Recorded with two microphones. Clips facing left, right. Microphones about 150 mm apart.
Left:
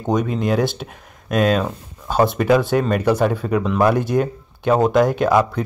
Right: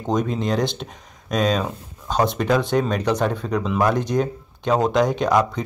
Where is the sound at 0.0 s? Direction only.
Centre (ahead or behind).